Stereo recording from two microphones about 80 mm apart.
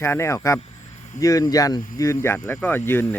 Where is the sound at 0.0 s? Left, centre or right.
Left.